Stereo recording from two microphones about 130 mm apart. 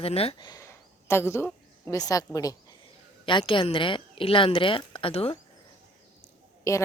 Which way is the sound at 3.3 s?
40° left (ahead or behind).